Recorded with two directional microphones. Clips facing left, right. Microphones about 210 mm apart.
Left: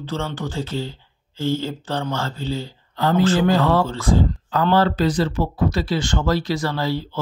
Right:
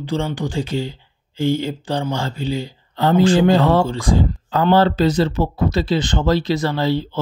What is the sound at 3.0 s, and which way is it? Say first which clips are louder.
Speech: right 4 dB; 25° right (ahead or behind).